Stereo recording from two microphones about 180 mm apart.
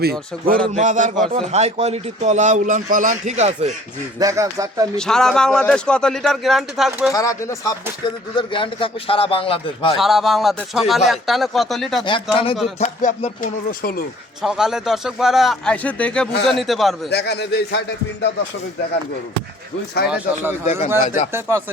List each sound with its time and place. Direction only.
0.0 s speech: 55° right (ahead or behind)
0.7 s a man's voice: 40° right (ahead or behind)
4.2 s speech: 15° right (ahead or behind)
4.9 s speech: 5° left (ahead or behind)
7.1 s speech: 20° left (ahead or behind)
10.0 s speech: centre (ahead or behind)
12.0 s speech: 25° left (ahead or behind)
12.8 s speech: 45° left (ahead or behind)
14.4 s speech: 5° right (ahead or behind)
17.1 s a man's voice: 65° left (ahead or behind)
20.1 s speech: 10° right (ahead or behind)
20.7 s a man's voice: 40° left (ahead or behind)